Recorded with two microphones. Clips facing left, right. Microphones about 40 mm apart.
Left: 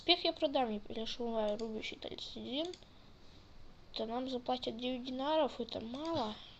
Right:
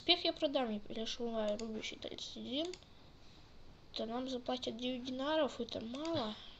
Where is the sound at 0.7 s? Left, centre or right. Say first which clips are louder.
Left 1 dB; centre.